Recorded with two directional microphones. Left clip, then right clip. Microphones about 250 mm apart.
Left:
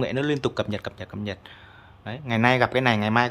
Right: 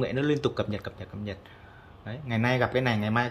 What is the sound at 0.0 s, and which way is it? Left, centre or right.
Speech, centre.